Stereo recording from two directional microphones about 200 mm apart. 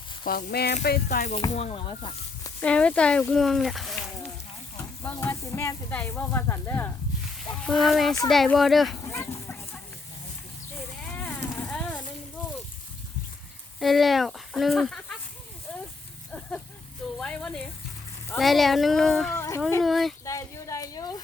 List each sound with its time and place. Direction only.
0.3 s speech: 45° left (ahead or behind)
1.4 s speech: 30° left (ahead or behind)
2.6 s speech: 5° left (ahead or behind)
4.8 s speech: 15° left (ahead or behind)
7.6 s speech: centre (ahead or behind)
9.0 s a sound: 15° left (ahead or behind)
11.0 s a sound: 10° left (ahead or behind)
13.7 s speech: centre (ahead or behind)
17.2 s speech: 5° left (ahead or behind)
19.4 s speech: 15° left (ahead or behind)
19.8 s speech: centre (ahead or behind)
20.2 s a sound: 15° left (ahead or behind)